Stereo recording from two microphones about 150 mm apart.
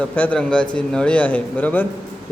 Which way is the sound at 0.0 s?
10° left (ahead or behind).